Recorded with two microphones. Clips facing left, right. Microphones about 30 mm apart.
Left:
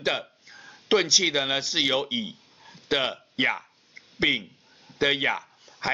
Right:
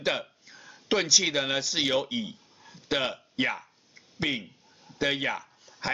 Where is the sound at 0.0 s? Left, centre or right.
Centre.